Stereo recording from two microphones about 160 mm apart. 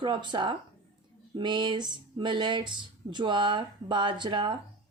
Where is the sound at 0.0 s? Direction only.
30° right (ahead or behind).